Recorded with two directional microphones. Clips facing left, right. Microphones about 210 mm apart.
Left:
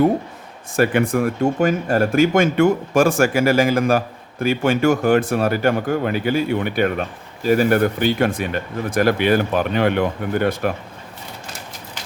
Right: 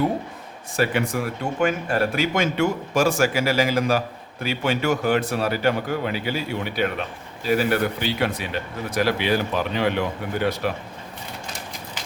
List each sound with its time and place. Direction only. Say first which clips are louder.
0.8 s speech: left 6 dB; 50° left (ahead or behind)